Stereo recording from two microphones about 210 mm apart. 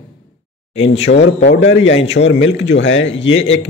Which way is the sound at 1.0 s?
55° left (ahead or behind).